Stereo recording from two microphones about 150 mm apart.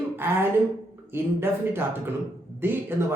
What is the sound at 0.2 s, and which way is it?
Speech, 15° right (ahead or behind).